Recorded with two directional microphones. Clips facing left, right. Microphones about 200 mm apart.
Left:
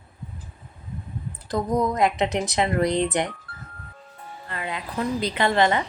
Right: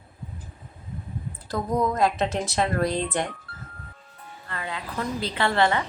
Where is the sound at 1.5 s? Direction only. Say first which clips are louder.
Left 2 dB; 20° left (ahead or behind).